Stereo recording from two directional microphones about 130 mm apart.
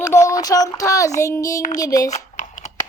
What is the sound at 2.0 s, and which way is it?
Typing, 65° left (ahead or behind).